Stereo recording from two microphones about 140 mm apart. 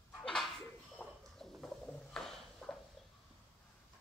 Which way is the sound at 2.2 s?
5° left (ahead or behind).